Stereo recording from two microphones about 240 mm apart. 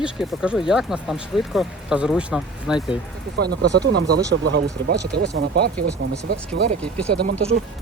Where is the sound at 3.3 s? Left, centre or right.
Right.